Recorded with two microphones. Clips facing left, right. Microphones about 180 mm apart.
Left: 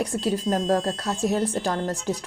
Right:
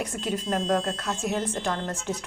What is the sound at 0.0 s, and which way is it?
Speech, 35° left (ahead or behind).